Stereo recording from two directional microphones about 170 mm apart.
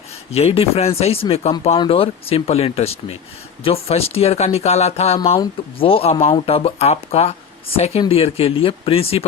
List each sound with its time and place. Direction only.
0.3 s speech: 35° left (ahead or behind)